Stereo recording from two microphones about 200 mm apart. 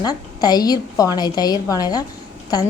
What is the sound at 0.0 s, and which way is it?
A woman's voice, 20° left (ahead or behind).